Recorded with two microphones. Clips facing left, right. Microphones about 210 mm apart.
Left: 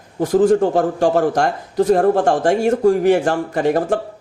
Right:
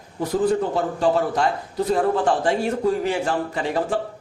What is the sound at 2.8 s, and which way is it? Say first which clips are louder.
Speech: left 9 dB; 70° left (ahead or behind).